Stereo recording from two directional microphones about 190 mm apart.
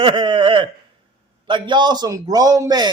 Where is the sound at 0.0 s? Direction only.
25° right (ahead or behind).